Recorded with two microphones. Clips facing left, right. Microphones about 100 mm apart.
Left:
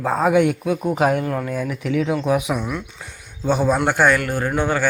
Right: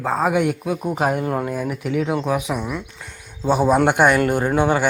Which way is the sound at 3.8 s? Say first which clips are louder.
Right 2 dB; 20° right (ahead or behind).